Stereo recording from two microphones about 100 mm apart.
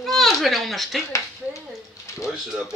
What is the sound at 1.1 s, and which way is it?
Speech, 30° left (ahead or behind).